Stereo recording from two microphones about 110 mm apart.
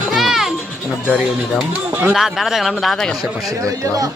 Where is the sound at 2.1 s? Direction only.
Centre (ahead or behind).